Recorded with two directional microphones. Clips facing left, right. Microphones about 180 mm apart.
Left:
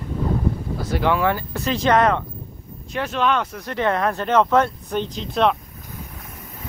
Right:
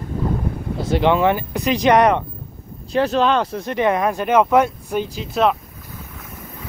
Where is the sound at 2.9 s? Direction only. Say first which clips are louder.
Right 5 dB; 35° right (ahead or behind).